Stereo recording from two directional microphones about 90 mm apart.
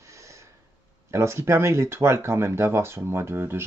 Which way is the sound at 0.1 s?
35° right (ahead or behind).